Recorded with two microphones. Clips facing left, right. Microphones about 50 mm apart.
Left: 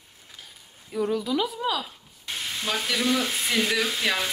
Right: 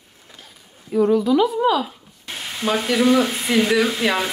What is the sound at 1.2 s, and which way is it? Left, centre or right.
A woman's voice, centre.